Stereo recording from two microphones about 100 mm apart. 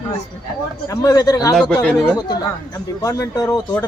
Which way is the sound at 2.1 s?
40° left (ahead or behind).